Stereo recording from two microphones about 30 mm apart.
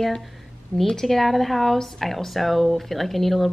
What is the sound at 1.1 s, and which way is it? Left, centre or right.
Speech, centre.